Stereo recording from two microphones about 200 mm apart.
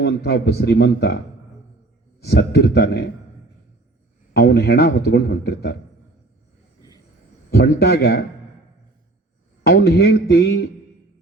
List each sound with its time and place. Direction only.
0.0 s a man's voice: 55° left (ahead or behind)
2.2 s a man's voice: 50° left (ahead or behind)
4.4 s a man's voice: 55° left (ahead or behind)
7.5 s a man's voice: 55° left (ahead or behind)
9.6 s a man's voice: 50° left (ahead or behind)